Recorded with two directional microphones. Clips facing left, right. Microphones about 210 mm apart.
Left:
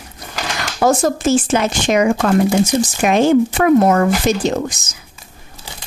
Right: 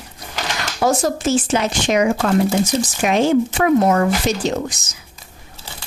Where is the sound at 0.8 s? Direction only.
50° left (ahead or behind).